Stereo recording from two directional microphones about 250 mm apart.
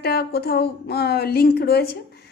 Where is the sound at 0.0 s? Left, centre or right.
Left.